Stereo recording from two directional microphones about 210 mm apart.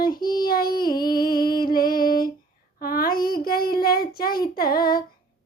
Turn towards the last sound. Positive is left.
turn(degrees=45)  # may be behind; listen again after turning